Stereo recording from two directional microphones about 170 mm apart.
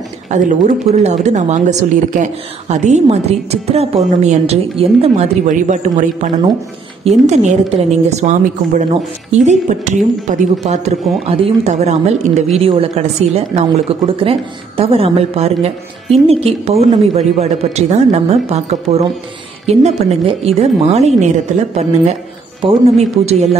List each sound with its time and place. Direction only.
0.3 s speech: 45° right (ahead or behind)
22.6 s speech: 35° right (ahead or behind)